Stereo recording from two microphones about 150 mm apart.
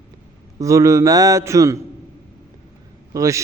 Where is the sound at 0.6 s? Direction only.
20° right (ahead or behind).